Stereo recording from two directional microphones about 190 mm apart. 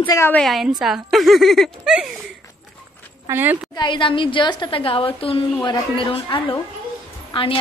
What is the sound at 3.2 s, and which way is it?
Speech, 10° right (ahead or behind).